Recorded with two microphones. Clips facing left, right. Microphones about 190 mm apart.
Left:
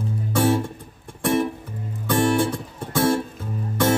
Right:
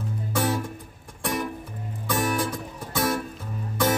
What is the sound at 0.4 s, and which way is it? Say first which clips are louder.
Music: left 6 dB; 25° left (ahead or behind).